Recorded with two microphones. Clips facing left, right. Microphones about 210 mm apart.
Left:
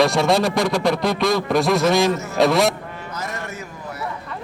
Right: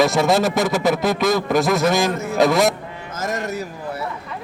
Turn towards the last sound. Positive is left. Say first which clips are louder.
# right 6 dB
turn(degrees=-40)  # may be behind; listen again after turning